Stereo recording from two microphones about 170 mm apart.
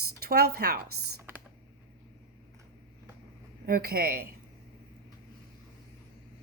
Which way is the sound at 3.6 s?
65° right (ahead or behind).